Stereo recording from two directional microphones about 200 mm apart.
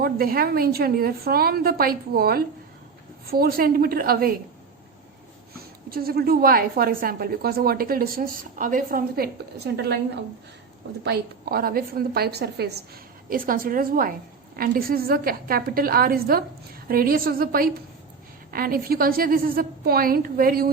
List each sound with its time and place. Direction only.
0.0 s a woman's voice: 50° right (ahead or behind)
5.9 s a woman's voice: 50° right (ahead or behind)
9.7 s a woman's voice: 60° right (ahead or behind)
11.0 s a woman's voice: 50° right (ahead or behind)